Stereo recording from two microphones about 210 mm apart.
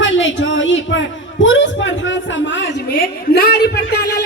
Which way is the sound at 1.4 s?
60° left (ahead or behind).